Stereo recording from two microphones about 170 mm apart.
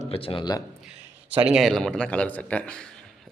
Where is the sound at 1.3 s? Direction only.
5° right (ahead or behind).